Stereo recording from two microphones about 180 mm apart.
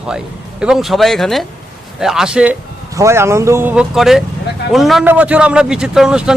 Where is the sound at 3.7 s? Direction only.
5° right (ahead or behind).